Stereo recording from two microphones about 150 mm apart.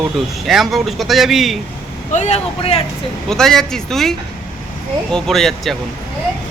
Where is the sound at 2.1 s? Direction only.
45° left (ahead or behind).